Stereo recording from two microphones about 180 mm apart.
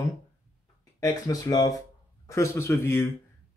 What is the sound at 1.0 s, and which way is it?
Speech, 15° left (ahead or behind).